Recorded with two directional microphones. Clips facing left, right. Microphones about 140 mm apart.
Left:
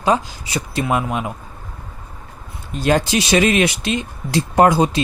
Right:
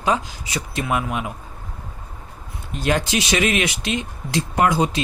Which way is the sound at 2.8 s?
35° left (ahead or behind).